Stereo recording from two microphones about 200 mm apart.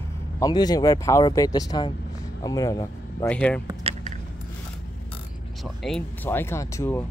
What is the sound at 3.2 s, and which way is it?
Speech, 5° left (ahead or behind).